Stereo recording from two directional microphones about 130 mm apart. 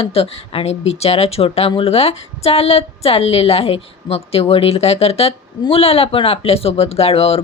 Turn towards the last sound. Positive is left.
turn(degrees=50)  # may be behind; listen again after turning